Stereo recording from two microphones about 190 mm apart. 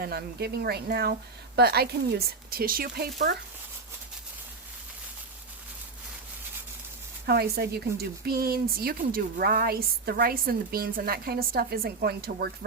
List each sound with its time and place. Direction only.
0.0 s a woman's voice: 55° right (ahead or behind)
7.3 s a woman's voice: 55° right (ahead or behind)